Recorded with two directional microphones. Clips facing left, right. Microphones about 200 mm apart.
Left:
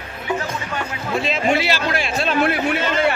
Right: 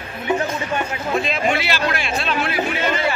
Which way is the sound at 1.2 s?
30° left (ahead or behind).